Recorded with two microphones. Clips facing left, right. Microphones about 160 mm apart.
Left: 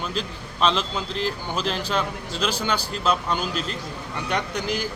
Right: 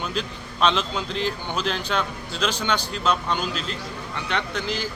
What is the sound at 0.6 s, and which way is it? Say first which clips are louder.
Speech: right 1 dB; centre (ahead or behind).